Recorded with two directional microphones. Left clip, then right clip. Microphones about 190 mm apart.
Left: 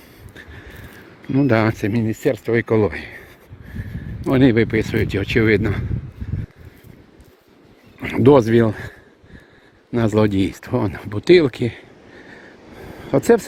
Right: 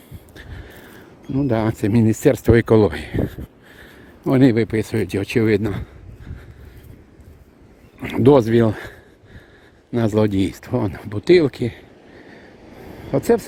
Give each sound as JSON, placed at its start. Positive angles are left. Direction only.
{"t": 1.3, "sound": "speech", "side_deg": 5}
{"t": 1.9, "sound": "speech", "side_deg": -30}
{"t": 4.3, "sound": "speech", "side_deg": -15}
{"t": 7.9, "sound": "speech", "side_deg": -5}
{"t": 8.7, "sound": "a man's voice", "side_deg": -15}
{"t": 10.2, "sound": "speech", "side_deg": -10}